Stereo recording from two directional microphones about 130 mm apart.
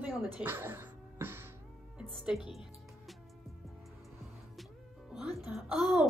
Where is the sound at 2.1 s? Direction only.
5° right (ahead or behind).